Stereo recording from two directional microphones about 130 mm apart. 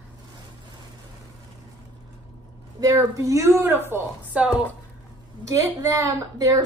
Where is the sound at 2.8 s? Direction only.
25° right (ahead or behind).